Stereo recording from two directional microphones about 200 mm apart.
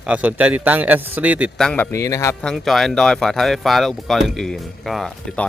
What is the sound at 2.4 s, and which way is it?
Speech, centre (ahead or behind).